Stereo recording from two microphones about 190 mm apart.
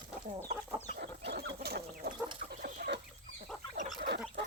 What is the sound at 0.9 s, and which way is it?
Chicken, 60° right (ahead or behind).